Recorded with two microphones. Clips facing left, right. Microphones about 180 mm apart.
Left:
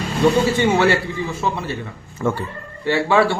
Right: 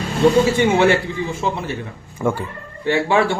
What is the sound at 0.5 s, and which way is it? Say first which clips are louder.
Speech: right 1 dB; 15° right (ahead or behind).